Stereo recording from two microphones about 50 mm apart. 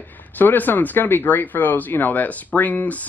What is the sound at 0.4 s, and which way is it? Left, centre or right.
Speech, left.